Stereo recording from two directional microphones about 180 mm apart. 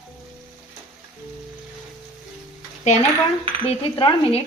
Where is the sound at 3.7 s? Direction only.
30° left (ahead or behind).